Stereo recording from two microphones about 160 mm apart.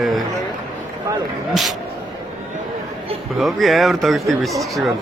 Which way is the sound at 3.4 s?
Centre (ahead or behind).